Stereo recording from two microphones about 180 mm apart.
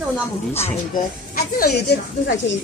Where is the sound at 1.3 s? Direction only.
60° left (ahead or behind).